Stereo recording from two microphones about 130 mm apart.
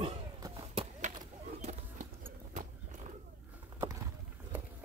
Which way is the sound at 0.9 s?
70° right (ahead or behind).